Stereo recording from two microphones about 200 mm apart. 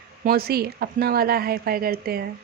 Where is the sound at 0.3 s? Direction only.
50° right (ahead or behind).